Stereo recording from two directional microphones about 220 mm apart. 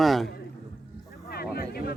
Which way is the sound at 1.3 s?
45° left (ahead or behind).